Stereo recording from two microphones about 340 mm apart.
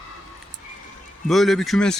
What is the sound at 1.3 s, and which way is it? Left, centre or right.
Speech, centre.